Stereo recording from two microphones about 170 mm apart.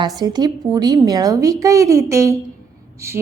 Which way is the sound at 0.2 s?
25° right (ahead or behind).